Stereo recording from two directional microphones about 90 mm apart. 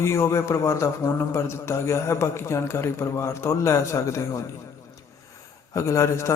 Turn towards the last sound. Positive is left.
turn(degrees=35)  # may be behind; listen again after turning